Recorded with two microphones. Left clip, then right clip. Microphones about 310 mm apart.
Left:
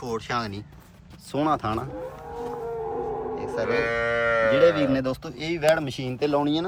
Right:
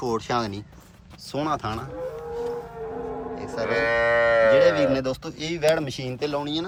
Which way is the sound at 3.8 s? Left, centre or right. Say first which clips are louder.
Right 4 dB; right.